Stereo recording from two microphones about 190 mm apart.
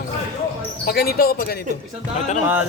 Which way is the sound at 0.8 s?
55° left (ahead or behind).